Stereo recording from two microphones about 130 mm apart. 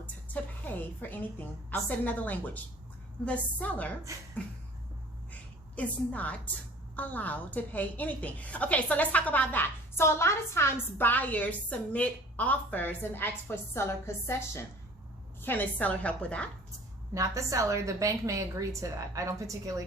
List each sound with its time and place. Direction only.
0.6 s a woman's voice: 15° left (ahead or behind)
5.3 s a woman's voice: 10° left (ahead or behind)
17.2 s a woman's voice: 25° right (ahead or behind)